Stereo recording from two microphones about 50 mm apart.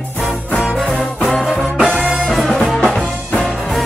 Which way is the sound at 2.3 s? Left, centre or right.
Centre.